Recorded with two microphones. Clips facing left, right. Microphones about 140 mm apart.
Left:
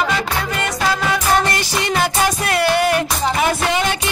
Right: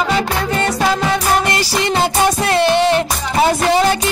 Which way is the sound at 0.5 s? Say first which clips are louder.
Right 5 dB; 30° right (ahead or behind).